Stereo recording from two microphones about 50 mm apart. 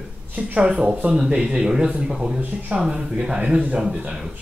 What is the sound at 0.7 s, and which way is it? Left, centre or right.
Speech, centre.